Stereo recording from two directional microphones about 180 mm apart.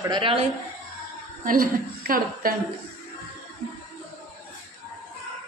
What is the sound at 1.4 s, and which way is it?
A woman's voice, 50° right (ahead or behind).